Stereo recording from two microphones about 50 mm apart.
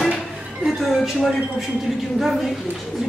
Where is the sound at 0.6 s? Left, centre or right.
Centre.